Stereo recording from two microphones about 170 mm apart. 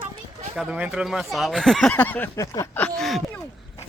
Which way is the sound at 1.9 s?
10° left (ahead or behind).